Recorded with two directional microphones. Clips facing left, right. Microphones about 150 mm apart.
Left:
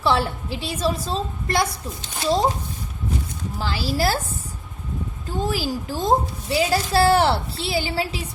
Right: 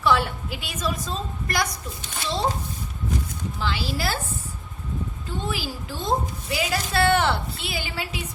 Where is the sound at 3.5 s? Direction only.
40° left (ahead or behind).